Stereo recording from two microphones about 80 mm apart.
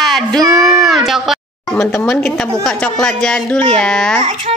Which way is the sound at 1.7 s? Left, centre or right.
Centre.